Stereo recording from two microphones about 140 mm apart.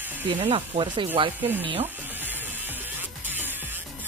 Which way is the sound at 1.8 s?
15° right (ahead or behind).